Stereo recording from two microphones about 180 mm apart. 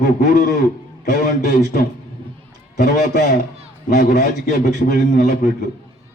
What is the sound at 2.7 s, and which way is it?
A man's voice, 60° left (ahead or behind).